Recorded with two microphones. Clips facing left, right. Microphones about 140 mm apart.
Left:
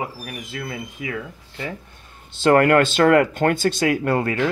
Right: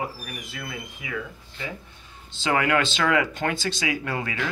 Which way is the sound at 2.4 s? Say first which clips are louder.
Left 8 dB; 55° left (ahead or behind).